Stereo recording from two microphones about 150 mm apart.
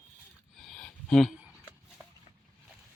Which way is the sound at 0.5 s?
5° left (ahead or behind).